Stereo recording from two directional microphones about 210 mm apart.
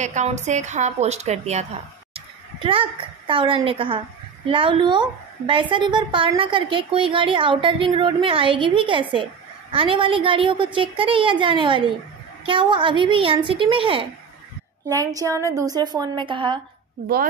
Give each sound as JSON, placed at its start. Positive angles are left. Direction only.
{"t": 0.0, "sound": "a woman's voice", "side_deg": -35}